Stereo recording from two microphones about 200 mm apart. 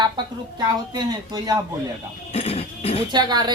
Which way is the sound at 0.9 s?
20° right (ahead or behind).